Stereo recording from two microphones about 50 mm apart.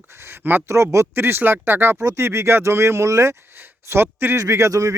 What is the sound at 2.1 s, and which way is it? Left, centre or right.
Speech, right.